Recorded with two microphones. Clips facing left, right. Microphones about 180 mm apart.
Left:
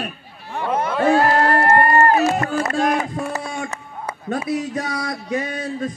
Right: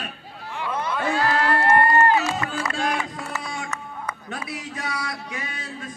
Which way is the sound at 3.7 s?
30° left (ahead or behind).